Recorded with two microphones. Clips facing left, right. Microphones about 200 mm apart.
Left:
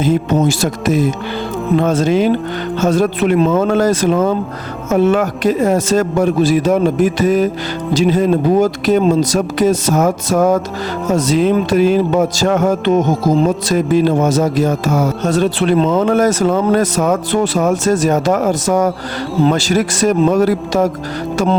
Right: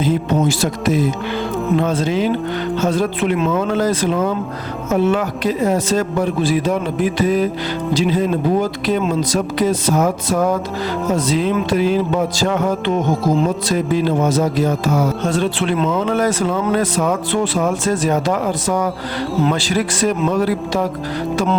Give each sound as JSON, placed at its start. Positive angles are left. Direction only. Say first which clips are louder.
{"t": 0.0, "sound": "speech", "louder": "left 3 dB", "side_deg": 45}